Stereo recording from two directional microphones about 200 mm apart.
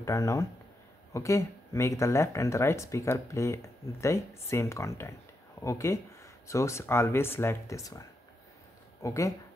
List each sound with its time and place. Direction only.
0.0 s speech: 15° left (ahead or behind)
9.0 s speech: 15° left (ahead or behind)